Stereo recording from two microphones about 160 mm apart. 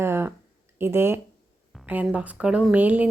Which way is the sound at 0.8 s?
15° right (ahead or behind).